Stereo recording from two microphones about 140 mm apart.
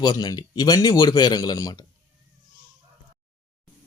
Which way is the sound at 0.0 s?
30° left (ahead or behind).